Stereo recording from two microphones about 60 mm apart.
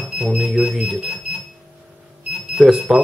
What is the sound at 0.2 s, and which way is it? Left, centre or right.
Speech, centre.